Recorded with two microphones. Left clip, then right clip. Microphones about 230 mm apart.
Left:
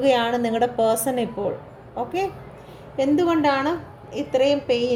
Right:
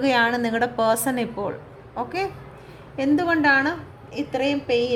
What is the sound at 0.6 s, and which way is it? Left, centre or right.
Speech, right.